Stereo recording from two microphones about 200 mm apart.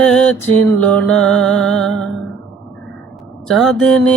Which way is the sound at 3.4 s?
Centre (ahead or behind).